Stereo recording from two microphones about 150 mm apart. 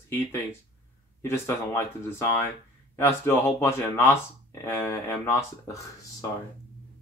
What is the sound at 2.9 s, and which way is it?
Speech, 15° left (ahead or behind).